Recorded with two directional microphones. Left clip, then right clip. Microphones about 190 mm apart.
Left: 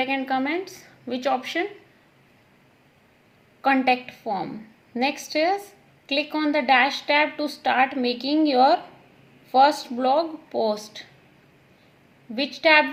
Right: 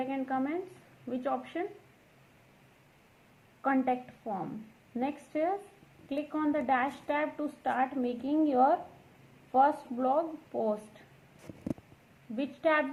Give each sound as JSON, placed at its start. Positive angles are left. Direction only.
{"t": 0.0, "sound": "a woman's voice", "side_deg": 25}
{"t": 3.6, "sound": "a woman's voice", "side_deg": 30}
{"t": 12.4, "sound": "a woman's voice", "side_deg": 25}